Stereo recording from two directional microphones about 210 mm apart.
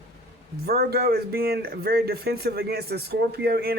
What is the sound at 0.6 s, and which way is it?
Speech, 50° right (ahead or behind).